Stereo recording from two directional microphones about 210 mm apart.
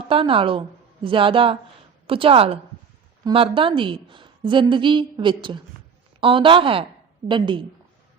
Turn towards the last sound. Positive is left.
turn(degrees=-20)  # may be behind; listen again after turning